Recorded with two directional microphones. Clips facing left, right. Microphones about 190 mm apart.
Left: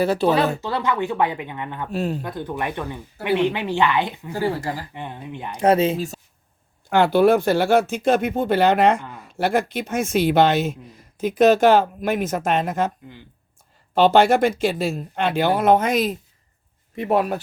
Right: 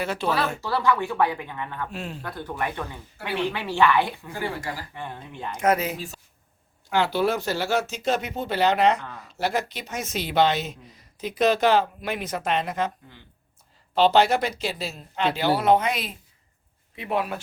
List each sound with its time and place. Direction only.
0.0 s speech: 35° left (ahead or behind)
0.6 s speech: 20° left (ahead or behind)
1.9 s speech: 40° left (ahead or behind)
2.2 s speech: 20° left (ahead or behind)
4.3 s speech: 35° left (ahead or behind)
4.7 s speech: 20° left (ahead or behind)
5.5 s speech: 30° left (ahead or behind)
6.9 s speech: 55° left (ahead or behind)
13.9 s speech: 50° left (ahead or behind)